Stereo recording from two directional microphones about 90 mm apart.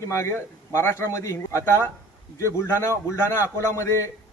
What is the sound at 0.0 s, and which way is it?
A man's voice, 30° left (ahead or behind).